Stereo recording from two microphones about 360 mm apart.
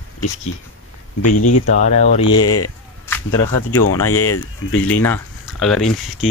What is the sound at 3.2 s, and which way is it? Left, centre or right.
Speech, left.